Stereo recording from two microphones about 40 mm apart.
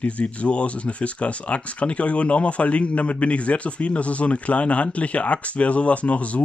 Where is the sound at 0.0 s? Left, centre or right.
Left.